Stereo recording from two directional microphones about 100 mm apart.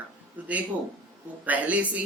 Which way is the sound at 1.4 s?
15° right (ahead or behind).